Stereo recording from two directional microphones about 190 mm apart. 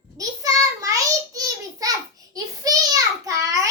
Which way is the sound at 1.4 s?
20° right (ahead or behind).